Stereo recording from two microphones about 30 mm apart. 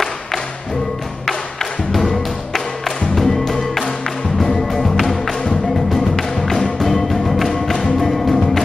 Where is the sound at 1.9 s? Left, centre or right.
Centre.